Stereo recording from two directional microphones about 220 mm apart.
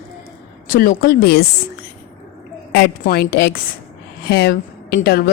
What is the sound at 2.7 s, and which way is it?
Speech, 45° left (ahead or behind).